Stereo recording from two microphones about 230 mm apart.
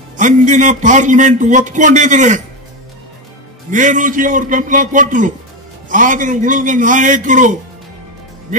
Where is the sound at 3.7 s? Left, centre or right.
Right.